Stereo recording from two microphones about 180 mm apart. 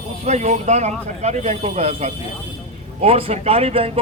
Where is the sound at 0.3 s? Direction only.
40° right (ahead or behind).